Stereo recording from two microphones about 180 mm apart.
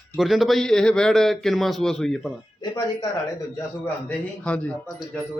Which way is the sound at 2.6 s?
20° left (ahead or behind).